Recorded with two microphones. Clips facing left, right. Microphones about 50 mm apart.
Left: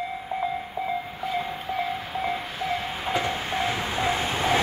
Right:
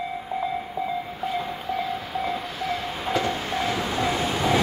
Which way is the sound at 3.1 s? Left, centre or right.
Left.